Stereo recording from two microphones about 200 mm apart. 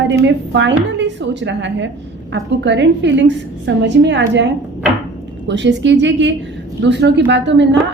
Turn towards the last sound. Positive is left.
turn(degrees=-65)  # may be behind; listen again after turning